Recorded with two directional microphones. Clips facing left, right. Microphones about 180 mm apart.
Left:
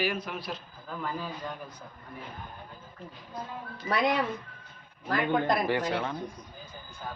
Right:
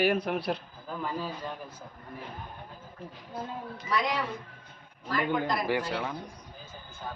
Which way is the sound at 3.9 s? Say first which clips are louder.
Left 3 dB; 55° left (ahead or behind).